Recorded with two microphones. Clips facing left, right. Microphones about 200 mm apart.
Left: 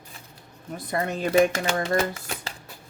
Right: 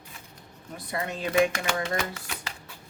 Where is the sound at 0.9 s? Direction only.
45° left (ahead or behind).